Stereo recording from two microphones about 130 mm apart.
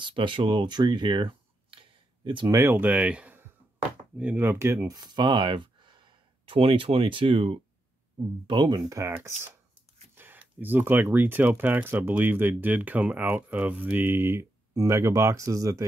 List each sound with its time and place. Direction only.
0.0 s speech: 40° right (ahead or behind)
2.5 s speech: 15° right (ahead or behind); by 7.6 s 45° right (ahead or behind)
8.5 s speech: 35° right (ahead or behind)